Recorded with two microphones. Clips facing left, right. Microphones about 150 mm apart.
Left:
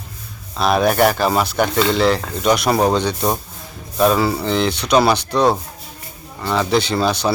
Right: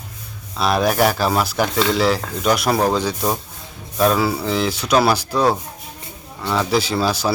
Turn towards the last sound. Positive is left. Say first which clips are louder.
# left 2 dB
turn(degrees=-5)  # may be behind; listen again after turning